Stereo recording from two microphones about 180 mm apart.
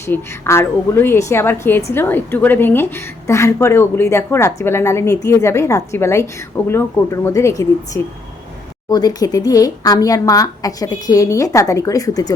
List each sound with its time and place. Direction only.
0.0 s a woman's voice: 15° left (ahead or behind)